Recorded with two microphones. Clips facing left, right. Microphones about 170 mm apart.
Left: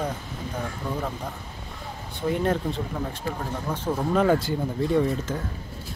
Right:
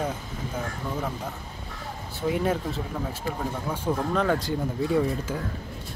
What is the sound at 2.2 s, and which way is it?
Speech, 5° right (ahead or behind).